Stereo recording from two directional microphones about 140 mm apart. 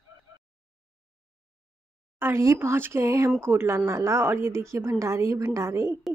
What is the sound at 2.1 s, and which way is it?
A woman's voice, 20° right (ahead or behind).